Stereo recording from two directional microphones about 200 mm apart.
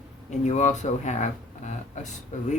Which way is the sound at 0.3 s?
35° left (ahead or behind).